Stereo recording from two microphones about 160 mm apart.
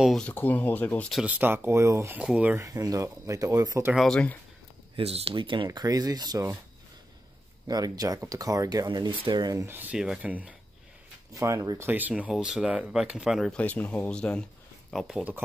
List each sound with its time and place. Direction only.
0.0 s speech: 5° left (ahead or behind)
1.2 s speech: 10° right (ahead or behind)
2.6 s speech: 20° right (ahead or behind)
3.9 s speech: 5° left (ahead or behind)
4.9 s speech: 40° right (ahead or behind)
7.6 s speech: 25° right (ahead or behind)
11.3 s speech: 20° right (ahead or behind)
11.9 s speech: 10° right (ahead or behind)